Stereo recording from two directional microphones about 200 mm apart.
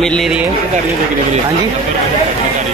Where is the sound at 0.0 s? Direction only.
Centre (ahead or behind).